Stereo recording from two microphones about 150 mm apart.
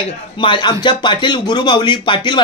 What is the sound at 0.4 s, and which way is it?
A woman's voice, 30° left (ahead or behind).